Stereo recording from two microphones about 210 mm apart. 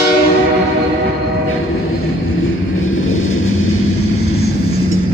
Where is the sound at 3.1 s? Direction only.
70° left (ahead or behind).